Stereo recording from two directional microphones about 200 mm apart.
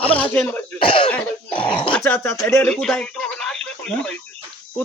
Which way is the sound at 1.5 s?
25° left (ahead or behind).